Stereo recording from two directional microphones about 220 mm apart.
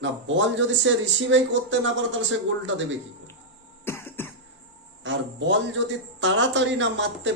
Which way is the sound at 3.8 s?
10° left (ahead or behind).